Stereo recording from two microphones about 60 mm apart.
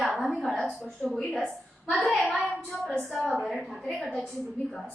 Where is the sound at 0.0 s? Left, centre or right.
Centre.